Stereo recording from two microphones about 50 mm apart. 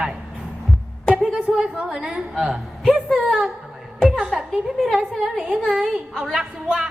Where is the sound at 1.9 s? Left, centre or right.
Centre.